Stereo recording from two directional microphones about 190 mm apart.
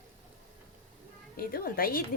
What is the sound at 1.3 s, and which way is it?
Speech, 50° left (ahead or behind).